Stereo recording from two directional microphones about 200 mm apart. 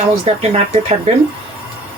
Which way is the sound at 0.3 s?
30° right (ahead or behind).